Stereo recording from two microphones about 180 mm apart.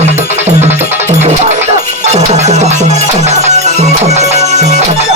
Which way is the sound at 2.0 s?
40° right (ahead or behind).